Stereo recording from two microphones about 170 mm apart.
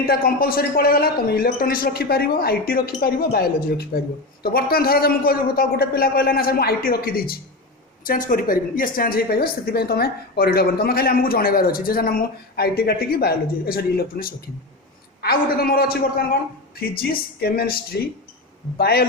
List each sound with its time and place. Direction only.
0.0 s a woman's voice: 60° left (ahead or behind)